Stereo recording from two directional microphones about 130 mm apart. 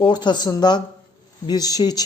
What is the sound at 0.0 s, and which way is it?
Speech, 35° left (ahead or behind).